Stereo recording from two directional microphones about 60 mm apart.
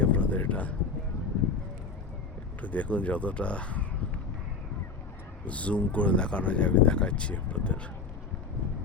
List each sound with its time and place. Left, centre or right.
0.0 s a sound: left
2.6 s speech: left
5.5 s speech: left